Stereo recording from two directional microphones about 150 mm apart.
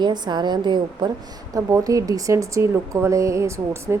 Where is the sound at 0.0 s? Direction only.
30° right (ahead or behind).